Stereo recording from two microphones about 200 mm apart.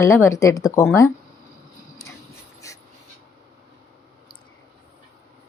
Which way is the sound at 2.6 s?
15° left (ahead or behind).